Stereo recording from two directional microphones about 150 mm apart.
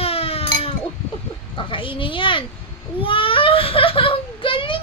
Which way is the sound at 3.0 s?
35° left (ahead or behind).